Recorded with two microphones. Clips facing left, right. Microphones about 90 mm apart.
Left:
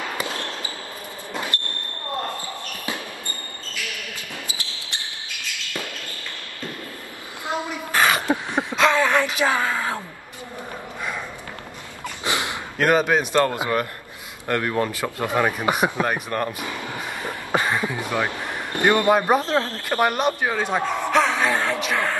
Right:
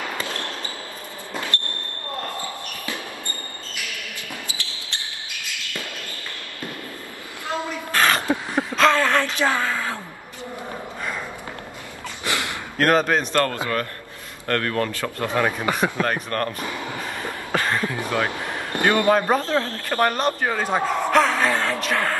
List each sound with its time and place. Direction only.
4.5 s basketball bounce: 20° left (ahead or behind)
7.4 s a sound: 20° left (ahead or behind)
8.7 s speech: 10° left (ahead or behind)
12.3 s gasp: 20° left (ahead or behind)
12.7 s speech: 5° left (ahead or behind)
17.5 s a sound: 15° left (ahead or behind)
18.8 s speech: 15° left (ahead or behind)